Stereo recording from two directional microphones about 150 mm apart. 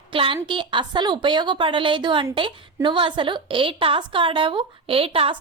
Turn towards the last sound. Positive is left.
turn(degrees=-40)  # may be behind; listen again after turning